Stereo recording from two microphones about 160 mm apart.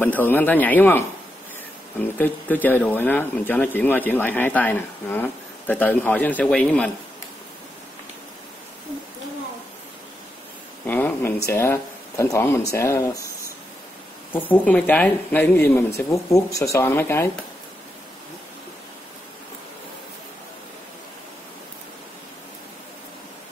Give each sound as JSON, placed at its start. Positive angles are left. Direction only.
{"t": 0.0, "sound": "speech", "side_deg": 10}
{"t": 2.1, "sound": "speech", "side_deg": 10}
{"t": 10.9, "sound": "speech", "side_deg": 10}
{"t": 14.3, "sound": "speech", "side_deg": 10}